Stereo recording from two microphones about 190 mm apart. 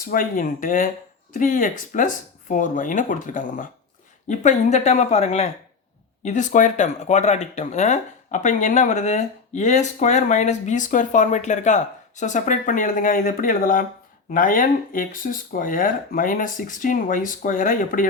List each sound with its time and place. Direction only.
0.0 s speech: 50° left (ahead or behind)